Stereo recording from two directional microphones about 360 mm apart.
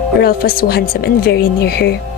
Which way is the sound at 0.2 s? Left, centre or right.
Left.